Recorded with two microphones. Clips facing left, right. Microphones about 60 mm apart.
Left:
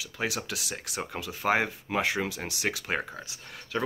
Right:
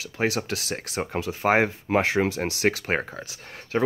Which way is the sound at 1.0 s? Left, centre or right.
Right.